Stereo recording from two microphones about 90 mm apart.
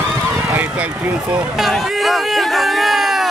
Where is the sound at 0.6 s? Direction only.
15° right (ahead or behind).